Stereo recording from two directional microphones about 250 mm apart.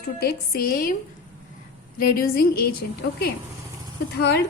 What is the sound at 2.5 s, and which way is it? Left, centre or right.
Speech, left.